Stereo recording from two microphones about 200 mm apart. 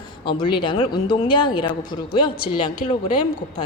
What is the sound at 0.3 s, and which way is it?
A woman's voice, 25° left (ahead or behind).